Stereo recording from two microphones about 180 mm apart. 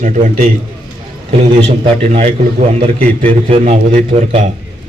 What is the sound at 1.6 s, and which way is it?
Speech, 35° right (ahead or behind).